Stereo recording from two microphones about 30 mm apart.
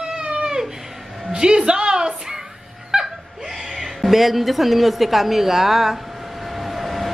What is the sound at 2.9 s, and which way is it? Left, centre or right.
Laughter, right.